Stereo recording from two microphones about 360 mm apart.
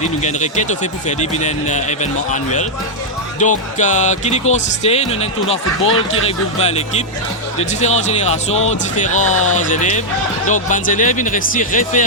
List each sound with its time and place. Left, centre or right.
0.0 s speech: centre
9.3 s speech: left
9.6 s speech: left